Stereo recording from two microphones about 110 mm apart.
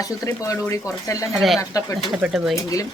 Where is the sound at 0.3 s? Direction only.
30° left (ahead or behind).